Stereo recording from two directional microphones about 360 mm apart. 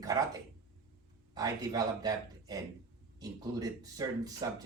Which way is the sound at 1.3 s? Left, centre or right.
Centre.